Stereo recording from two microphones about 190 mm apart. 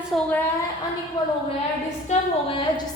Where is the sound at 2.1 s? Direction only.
25° left (ahead or behind).